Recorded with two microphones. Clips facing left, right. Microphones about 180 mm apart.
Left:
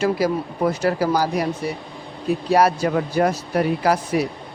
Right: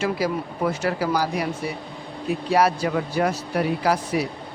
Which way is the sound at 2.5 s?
45° left (ahead or behind).